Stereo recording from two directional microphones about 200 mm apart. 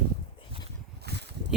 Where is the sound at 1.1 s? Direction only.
55° right (ahead or behind).